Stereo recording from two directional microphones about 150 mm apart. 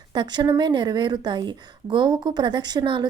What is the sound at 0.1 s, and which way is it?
A woman's voice, 30° right (ahead or behind).